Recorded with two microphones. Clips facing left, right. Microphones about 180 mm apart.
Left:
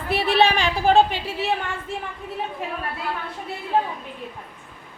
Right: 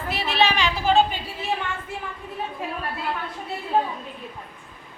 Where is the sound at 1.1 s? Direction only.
80° left.